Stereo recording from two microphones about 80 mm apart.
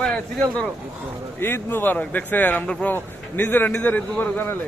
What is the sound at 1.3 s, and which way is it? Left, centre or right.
Speech, left.